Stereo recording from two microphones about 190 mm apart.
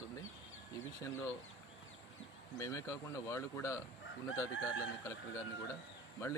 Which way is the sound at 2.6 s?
15° left (ahead or behind).